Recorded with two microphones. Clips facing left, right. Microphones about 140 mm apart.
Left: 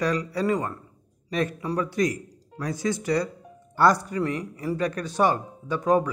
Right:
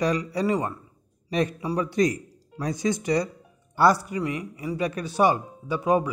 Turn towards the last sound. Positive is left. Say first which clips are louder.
# left 1 dB
turn(degrees=-10)  # may be behind; listen again after turning